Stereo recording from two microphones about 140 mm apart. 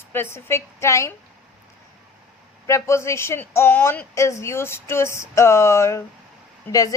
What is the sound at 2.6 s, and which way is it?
Speech, 20° left (ahead or behind).